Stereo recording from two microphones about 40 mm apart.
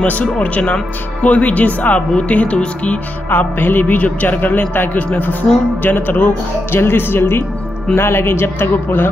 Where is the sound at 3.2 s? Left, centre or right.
Left.